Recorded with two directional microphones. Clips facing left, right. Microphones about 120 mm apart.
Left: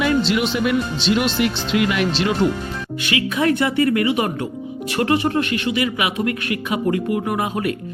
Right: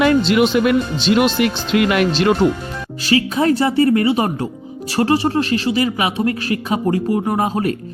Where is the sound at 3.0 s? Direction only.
35° right (ahead or behind).